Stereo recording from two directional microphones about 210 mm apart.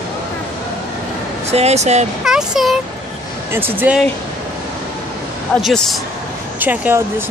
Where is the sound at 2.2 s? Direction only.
5° right (ahead or behind).